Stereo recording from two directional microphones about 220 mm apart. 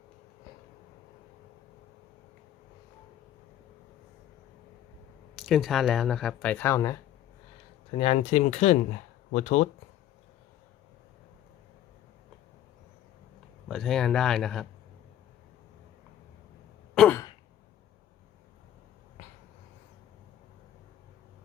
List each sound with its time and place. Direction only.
5.4 s speech: centre (ahead or behind)
7.9 s speech: 25° left (ahead or behind)
13.7 s speech: centre (ahead or behind)
16.9 s throat clearing: centre (ahead or behind)